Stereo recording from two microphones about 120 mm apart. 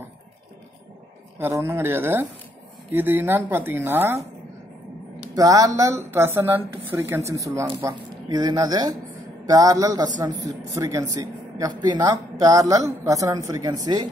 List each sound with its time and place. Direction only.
1.4 s speech: 20° right (ahead or behind)
5.3 s speech: 30° right (ahead or behind)